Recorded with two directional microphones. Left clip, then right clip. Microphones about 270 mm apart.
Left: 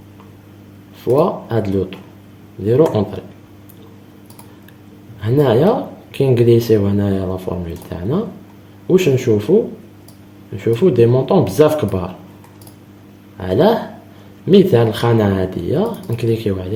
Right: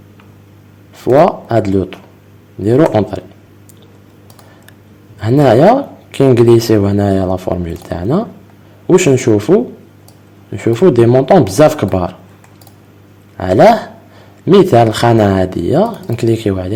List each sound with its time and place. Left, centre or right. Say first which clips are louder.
1.2 s speech: right 7 dB; right
5.2 s speech: right 6 dB; right
10.6 s speech: right 3 dB; right
13.3 s a man's voice: right 7 dB; right